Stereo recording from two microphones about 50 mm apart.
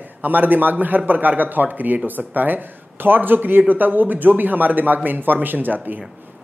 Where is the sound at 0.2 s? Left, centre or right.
Right.